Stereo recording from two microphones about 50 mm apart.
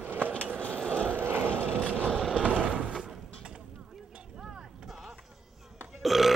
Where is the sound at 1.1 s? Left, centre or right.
Right.